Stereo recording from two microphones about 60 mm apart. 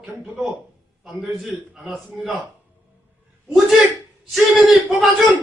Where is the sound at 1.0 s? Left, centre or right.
Centre.